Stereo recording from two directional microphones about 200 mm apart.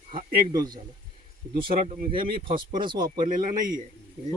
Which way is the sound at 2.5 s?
45° right (ahead or behind).